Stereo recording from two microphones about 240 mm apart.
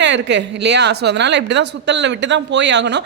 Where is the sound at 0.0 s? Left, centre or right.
Right.